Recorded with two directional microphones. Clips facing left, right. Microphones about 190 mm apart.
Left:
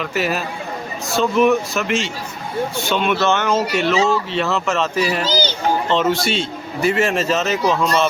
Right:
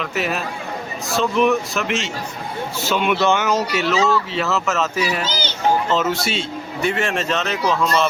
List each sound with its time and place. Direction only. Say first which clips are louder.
0.0 s speech: left 2 dB; centre (ahead or behind)
3.5 s speech: left 2 dB; centre (ahead or behind)
5.2 s a child's voice: left 6 dB; 35° left (ahead or behind)
5.9 s speech: left 2 dB; 5° right (ahead or behind)